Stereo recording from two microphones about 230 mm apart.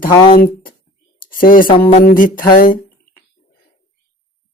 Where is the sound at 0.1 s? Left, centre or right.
Centre.